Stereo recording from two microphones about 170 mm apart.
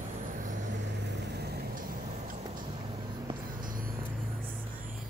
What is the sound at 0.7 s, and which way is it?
Vehicle, 80° right.